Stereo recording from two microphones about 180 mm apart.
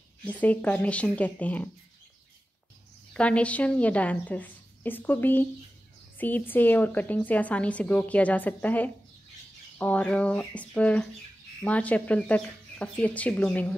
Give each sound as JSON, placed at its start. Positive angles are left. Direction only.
{"t": 0.2, "sound": "a woman's voice", "side_deg": 10}
{"t": 3.1, "sound": "a woman's voice", "side_deg": 5}